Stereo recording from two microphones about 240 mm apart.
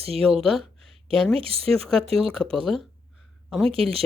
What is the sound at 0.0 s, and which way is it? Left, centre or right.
Speech, right.